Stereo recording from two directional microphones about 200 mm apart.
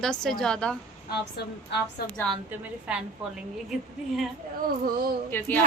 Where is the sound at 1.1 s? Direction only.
55° left (ahead or behind).